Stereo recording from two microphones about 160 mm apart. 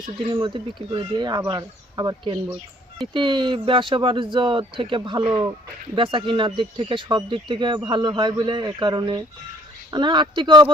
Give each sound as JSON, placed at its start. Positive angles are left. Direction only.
{"t": 0.0, "sound": "speech", "side_deg": -30}